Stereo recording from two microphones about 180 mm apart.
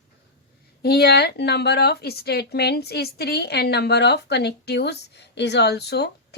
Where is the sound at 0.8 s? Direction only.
60° left (ahead or behind).